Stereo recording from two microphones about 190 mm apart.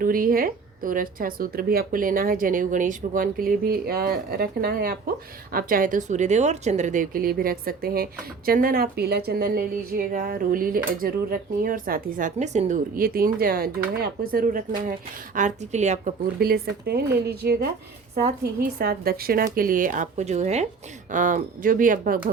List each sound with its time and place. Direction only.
0.0 s speech: 50° right (ahead or behind)
16.4 s speech: 55° right (ahead or behind)
18.8 s speech: 50° right (ahead or behind)